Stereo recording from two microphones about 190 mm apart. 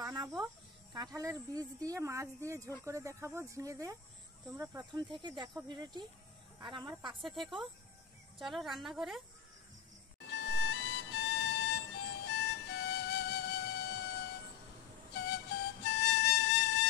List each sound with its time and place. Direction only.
0.0 s a sound: 20° right (ahead or behind)
0.9 s speech: 20° right (ahead or behind)
7.2 s speech: centre (ahead or behind)
10.2 s music: 65° left (ahead or behind)
15.1 s flute: 60° left (ahead or behind)